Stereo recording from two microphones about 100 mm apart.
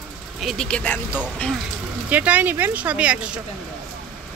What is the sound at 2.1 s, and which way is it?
Speech, 15° right (ahead or behind).